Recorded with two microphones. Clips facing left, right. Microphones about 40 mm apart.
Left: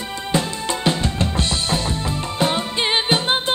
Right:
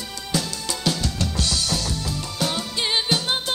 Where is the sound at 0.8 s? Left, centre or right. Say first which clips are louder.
Left 3 dB; left.